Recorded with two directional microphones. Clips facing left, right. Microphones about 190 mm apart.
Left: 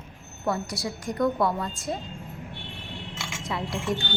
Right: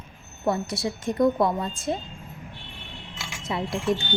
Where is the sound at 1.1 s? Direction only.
20° right (ahead or behind).